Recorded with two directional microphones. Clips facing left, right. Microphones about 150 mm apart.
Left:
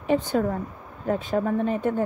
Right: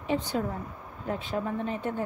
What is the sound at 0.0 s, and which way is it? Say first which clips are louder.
A woman's voice: left 6 dB; 50° left (ahead or behind).